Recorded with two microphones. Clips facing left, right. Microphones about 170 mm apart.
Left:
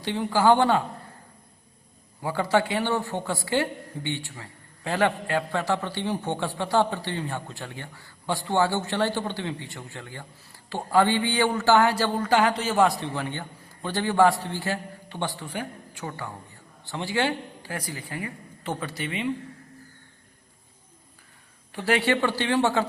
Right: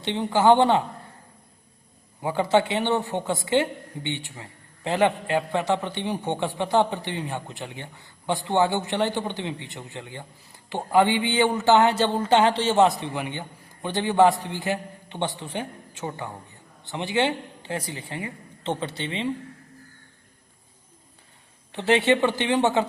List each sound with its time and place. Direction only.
0.0 s a man's voice: 20° right (ahead or behind)
2.2 s a man's voice: 20° right (ahead or behind)
21.7 s a man's voice: 25° right (ahead or behind)